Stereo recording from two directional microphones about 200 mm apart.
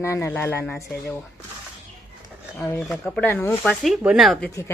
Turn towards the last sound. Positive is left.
turn(degrees=0)  # may be behind; listen again after turning